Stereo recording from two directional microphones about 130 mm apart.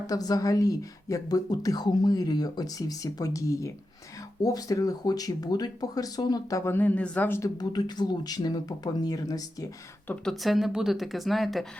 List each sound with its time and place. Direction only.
0.1 s speech: 30° left (ahead or behind)
6.7 s speech: 10° left (ahead or behind)
7.6 s speech: 30° left (ahead or behind)
10.2 s speech: centre (ahead or behind)